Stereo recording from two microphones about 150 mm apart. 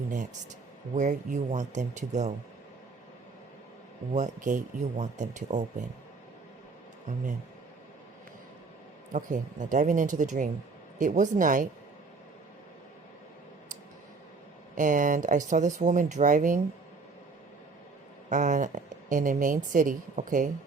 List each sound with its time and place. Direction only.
0.9 s speech: 55° right (ahead or behind)
4.1 s speech: 55° right (ahead or behind)
9.1 s speech: 55° right (ahead or behind)
14.8 s speech: 60° right (ahead or behind)
18.3 s speech: 55° right (ahead or behind)